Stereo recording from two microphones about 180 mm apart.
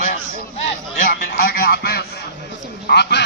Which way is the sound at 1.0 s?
50° left (ahead or behind).